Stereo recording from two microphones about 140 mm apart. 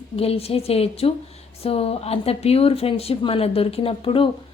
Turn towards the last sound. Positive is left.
turn(degrees=40)  # may be behind; listen again after turning